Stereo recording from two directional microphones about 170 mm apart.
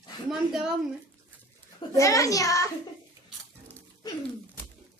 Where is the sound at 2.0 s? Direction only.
20° left (ahead or behind).